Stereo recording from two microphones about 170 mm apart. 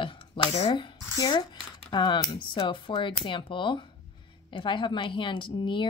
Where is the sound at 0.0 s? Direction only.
25° left (ahead or behind).